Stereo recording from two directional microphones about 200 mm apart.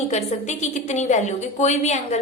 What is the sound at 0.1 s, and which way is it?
A woman's voice, 35° left (ahead or behind).